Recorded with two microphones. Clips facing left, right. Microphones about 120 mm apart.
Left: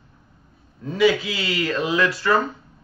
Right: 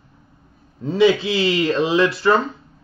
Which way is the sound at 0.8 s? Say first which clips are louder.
Right 3 dB; 25° right (ahead or behind).